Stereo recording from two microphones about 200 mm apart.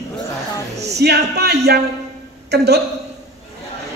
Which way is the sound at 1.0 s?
55° right (ahead or behind).